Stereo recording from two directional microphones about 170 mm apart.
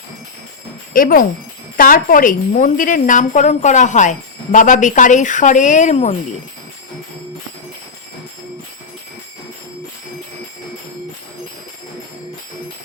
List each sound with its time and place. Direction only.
0.9 s a woman's voice: 55° left (ahead or behind)